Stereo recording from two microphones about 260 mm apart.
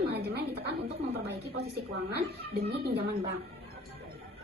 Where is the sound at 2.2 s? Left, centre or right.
Right.